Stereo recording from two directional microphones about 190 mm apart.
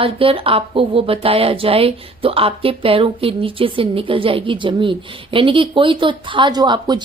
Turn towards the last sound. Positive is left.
turn(degrees=-25)  # may be behind; listen again after turning